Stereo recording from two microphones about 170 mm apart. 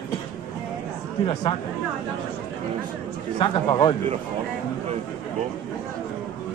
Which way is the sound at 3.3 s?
25° left (ahead or behind).